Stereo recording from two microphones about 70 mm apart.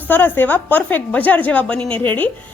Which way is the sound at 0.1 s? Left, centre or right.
Left.